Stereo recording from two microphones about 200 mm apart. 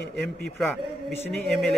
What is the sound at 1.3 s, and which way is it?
Speech, 5° left (ahead or behind).